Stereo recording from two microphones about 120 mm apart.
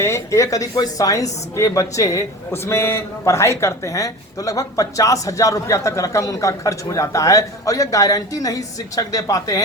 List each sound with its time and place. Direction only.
0.0 s a woman's voice: 25° left (ahead or behind)